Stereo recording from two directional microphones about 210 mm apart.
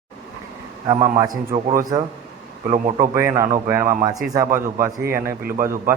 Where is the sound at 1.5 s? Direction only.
15° right (ahead or behind).